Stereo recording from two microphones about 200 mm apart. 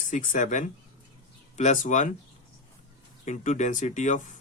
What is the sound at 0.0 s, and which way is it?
Speech, 40° left (ahead or behind).